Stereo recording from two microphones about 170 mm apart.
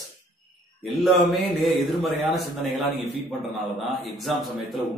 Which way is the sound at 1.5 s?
Centre (ahead or behind).